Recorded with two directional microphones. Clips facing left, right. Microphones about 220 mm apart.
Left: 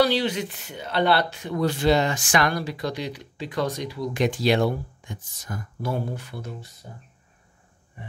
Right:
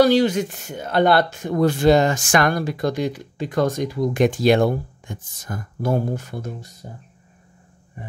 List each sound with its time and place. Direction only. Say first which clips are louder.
0.0 s speech: right 6 dB; 45° right (ahead or behind)